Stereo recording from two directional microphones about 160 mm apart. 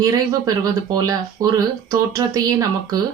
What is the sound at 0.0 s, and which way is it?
Speech, 20° right (ahead or behind).